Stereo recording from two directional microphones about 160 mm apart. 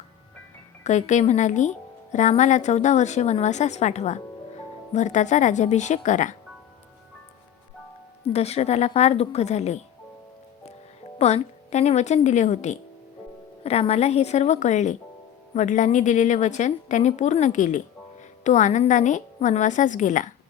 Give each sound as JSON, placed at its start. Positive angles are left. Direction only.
{"t": 0.9, "sound": "a woman's voice", "side_deg": 50}
{"t": 8.3, "sound": "a woman's voice", "side_deg": 40}
{"t": 11.2, "sound": "a woman's voice", "side_deg": 45}